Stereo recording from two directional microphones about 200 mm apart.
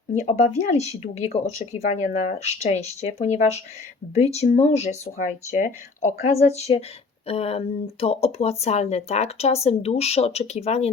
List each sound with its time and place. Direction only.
0.1 s speech: 35° left (ahead or behind)